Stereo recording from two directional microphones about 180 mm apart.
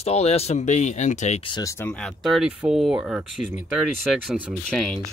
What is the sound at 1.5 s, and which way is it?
Speech, 15° left (ahead or behind).